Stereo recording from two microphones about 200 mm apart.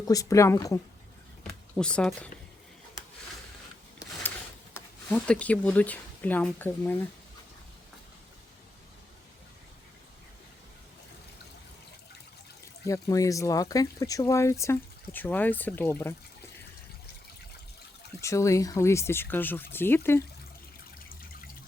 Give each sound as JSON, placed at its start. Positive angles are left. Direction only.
{"t": 0.0, "sound": "speech", "side_deg": 15}
{"t": 1.5, "sound": "speech", "side_deg": 5}
{"t": 4.7, "sound": "speech", "side_deg": 5}
{"t": 12.8, "sound": "speech", "side_deg": 15}
{"t": 18.2, "sound": "speech", "side_deg": 15}